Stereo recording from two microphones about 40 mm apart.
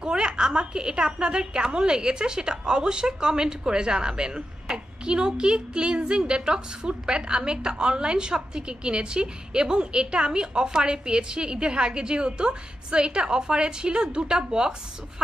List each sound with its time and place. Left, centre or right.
0.0 s a woman's voice: right